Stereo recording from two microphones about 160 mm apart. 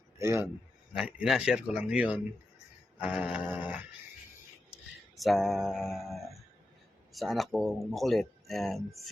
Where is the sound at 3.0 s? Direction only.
5° right (ahead or behind).